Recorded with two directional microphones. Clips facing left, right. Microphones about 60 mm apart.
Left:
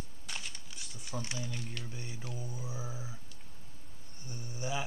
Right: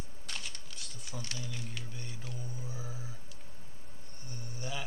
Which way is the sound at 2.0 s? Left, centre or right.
Centre.